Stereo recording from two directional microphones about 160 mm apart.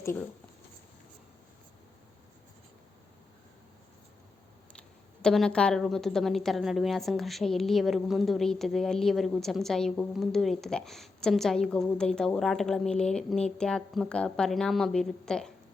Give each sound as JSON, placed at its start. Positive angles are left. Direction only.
{"t": 0.0, "sound": "speech", "side_deg": 15}
{"t": 4.7, "sound": "speech", "side_deg": 5}